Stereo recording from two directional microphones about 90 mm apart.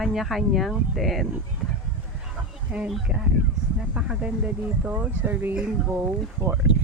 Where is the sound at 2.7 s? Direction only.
15° right (ahead or behind).